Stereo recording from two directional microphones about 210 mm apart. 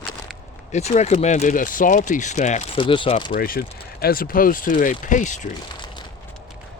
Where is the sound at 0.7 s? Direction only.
30° left (ahead or behind).